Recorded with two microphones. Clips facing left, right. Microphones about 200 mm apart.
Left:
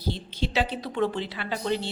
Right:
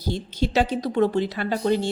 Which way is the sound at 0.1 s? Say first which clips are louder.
Right 5 dB; 45° right (ahead or behind).